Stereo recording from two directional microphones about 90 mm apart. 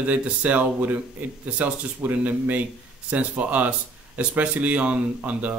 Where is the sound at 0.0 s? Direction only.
15° right (ahead or behind).